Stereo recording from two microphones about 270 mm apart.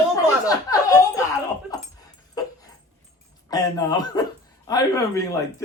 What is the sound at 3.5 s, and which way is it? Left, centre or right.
Speech, centre.